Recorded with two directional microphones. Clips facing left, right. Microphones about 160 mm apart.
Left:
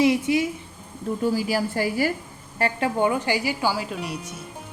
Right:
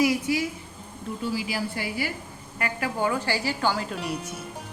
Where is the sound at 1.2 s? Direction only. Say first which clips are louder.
Left 6 dB; 45° left (ahead or behind).